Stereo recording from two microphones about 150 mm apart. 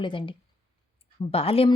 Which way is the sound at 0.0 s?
35° left (ahead or behind).